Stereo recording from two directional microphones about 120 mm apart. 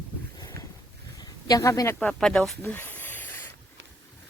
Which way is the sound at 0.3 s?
30° left (ahead or behind).